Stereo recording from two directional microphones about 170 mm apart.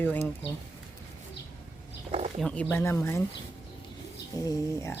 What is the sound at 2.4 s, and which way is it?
Speech, 5° left (ahead or behind).